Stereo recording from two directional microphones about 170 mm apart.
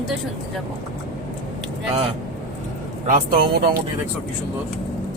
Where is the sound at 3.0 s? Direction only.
60° right (ahead or behind).